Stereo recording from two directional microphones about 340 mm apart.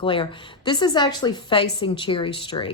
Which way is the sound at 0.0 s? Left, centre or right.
Centre.